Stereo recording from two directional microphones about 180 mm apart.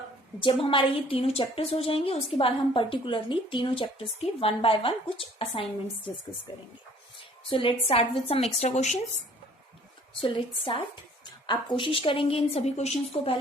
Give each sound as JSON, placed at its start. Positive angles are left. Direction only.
{"t": 0.4, "sound": "a woman's voice", "side_deg": 30}